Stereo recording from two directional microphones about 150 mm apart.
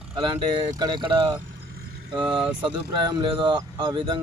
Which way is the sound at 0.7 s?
30° right (ahead or behind).